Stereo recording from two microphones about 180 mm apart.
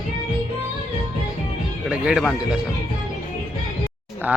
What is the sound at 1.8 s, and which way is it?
Speech, 5° right (ahead or behind).